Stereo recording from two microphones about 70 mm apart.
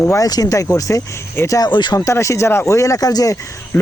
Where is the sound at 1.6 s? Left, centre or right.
Left.